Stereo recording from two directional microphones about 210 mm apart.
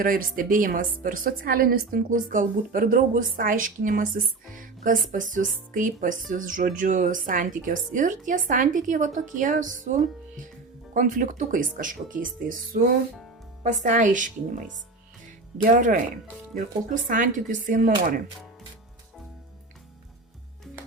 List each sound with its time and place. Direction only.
0.0 s a woman's voice: 40° right (ahead or behind)
4.5 s music: 40° right (ahead or behind)
5.1 s a woman's voice: 40° right (ahead or behind)
15.6 s a woman's voice: 40° right (ahead or behind)